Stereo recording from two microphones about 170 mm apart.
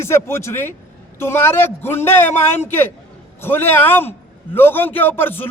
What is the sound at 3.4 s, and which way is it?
A man's voice, 10° left (ahead or behind).